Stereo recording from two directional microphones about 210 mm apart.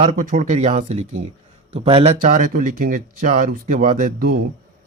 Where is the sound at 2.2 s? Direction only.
40° right (ahead or behind).